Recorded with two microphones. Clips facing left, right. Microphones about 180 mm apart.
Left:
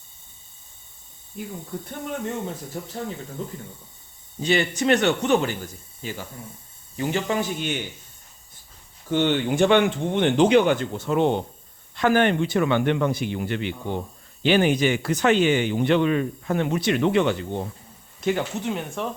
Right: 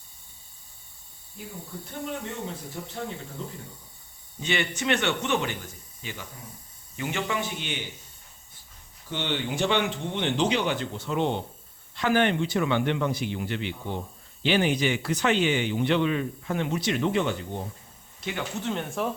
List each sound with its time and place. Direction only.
2.0 s speech: 50° left (ahead or behind)
4.4 s speech: 35° left (ahead or behind)
9.0 s speech: 50° left (ahead or behind); by 17.6 s 75° left (ahead or behind)
18.2 s speech: 45° left (ahead or behind)
18.5 s speech: 10° left (ahead or behind)